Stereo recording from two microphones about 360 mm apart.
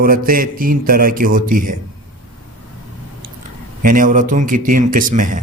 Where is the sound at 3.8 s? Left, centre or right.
Right.